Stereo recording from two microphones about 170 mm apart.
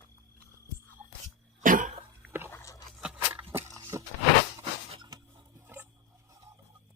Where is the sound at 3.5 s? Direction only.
15° right (ahead or behind).